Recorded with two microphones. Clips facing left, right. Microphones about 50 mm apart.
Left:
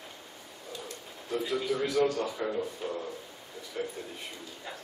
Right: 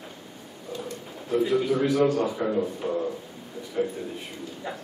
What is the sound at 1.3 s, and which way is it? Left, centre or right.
A man's voice, centre.